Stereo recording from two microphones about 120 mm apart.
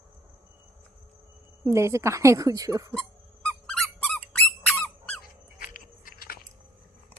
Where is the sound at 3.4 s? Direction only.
10° left (ahead or behind).